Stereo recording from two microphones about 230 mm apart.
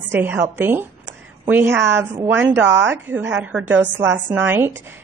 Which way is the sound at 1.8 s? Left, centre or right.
Centre.